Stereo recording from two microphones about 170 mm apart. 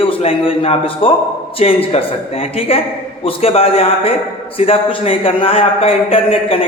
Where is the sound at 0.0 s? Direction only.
35° left (ahead or behind).